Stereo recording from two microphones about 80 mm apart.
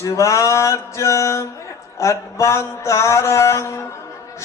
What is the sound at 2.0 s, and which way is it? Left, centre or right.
Mantra, left.